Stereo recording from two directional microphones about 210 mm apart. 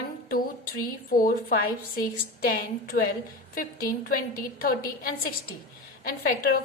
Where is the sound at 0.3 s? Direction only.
45° left (ahead or behind).